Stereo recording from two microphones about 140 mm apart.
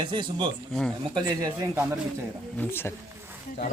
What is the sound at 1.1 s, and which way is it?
Speech, 25° right (ahead or behind).